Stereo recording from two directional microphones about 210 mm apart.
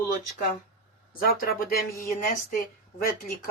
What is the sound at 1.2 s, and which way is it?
Speech, 45° left (ahead or behind).